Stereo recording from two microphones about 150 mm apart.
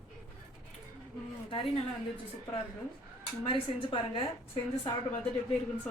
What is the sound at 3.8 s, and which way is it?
Speech, 35° left (ahead or behind).